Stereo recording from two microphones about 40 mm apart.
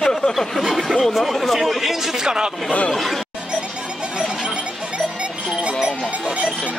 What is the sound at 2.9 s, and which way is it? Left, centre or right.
Speech, centre.